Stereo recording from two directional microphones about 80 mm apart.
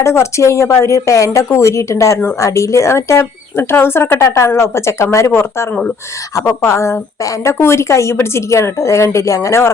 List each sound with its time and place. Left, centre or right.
0.0 s a woman's voice: left